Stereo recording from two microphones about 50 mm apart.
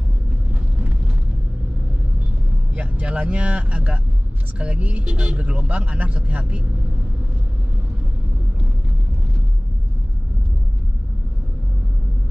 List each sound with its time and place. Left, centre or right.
2.7 s speech: right